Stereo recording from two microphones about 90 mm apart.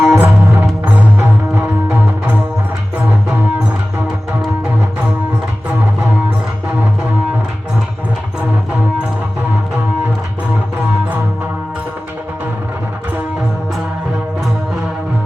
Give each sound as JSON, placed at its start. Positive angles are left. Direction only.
{"t": 0.0, "sound": "music", "side_deg": -25}